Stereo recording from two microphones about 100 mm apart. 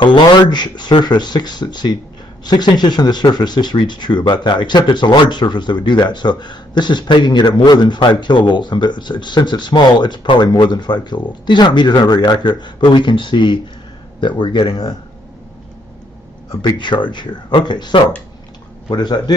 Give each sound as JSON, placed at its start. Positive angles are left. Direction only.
{"t": 0.0, "sound": "speech", "side_deg": 50}
{"t": 16.6, "sound": "speech", "side_deg": 50}